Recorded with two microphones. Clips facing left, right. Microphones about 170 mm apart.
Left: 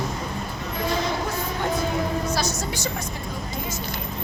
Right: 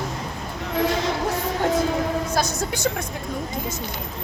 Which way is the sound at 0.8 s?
80° right.